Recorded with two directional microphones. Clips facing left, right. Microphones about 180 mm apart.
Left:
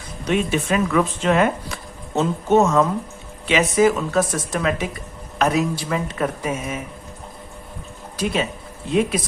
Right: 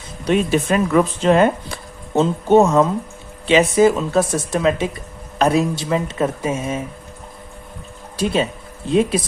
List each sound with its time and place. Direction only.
0.3 s speech: 35° right (ahead or behind)
8.1 s speech: 30° right (ahead or behind)